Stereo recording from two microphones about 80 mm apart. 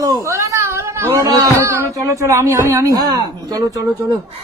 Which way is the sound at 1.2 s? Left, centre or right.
Right.